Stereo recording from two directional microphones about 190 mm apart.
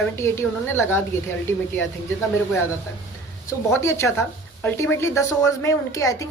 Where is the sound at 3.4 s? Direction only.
15° left (ahead or behind).